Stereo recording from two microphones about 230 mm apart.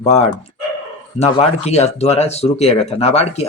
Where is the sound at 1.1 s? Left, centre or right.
Left.